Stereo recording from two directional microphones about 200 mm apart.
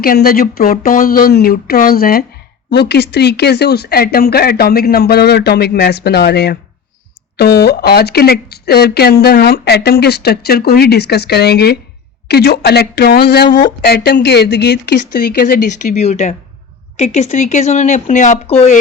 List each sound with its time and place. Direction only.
0.0 s speech: 45° left (ahead or behind)